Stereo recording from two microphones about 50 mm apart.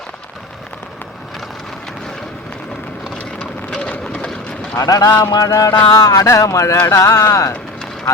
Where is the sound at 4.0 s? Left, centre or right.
Centre.